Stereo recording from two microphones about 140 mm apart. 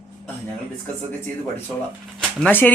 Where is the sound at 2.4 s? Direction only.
15° left (ahead or behind).